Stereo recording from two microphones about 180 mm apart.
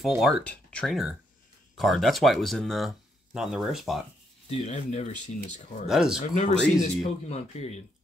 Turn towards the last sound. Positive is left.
turn(degrees=35)  # may be behind; listen again after turning